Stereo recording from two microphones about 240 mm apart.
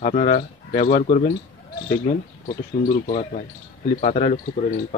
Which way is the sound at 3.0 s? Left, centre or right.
Left.